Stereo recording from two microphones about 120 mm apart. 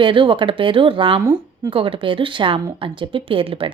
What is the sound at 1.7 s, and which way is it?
A woman's voice, 45° right (ahead or behind).